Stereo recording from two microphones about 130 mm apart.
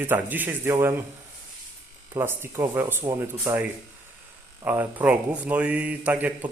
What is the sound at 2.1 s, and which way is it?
Speech, 20° right (ahead or behind).